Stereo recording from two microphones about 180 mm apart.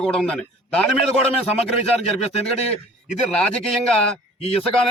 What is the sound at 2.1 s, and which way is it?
Speech, 35° left (ahead or behind).